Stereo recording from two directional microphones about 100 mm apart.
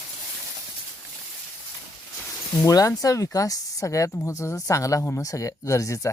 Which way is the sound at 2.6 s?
35° left (ahead or behind).